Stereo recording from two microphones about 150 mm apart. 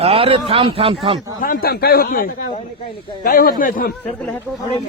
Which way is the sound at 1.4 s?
75° left (ahead or behind).